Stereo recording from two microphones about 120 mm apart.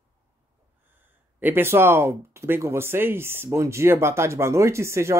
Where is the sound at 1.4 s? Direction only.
20° right (ahead or behind).